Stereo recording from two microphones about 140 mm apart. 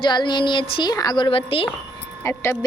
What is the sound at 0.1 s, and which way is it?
A woman's voice, 30° left (ahead or behind).